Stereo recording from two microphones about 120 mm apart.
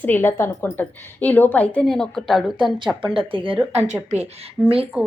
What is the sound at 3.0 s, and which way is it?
Speech, 45° right (ahead or behind).